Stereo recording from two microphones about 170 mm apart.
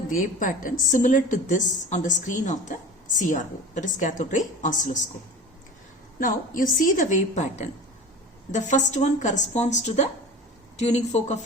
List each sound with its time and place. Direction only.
0.1 s a woman's voice: 50° left (ahead or behind)
6.1 s a woman's voice: 50° left (ahead or behind)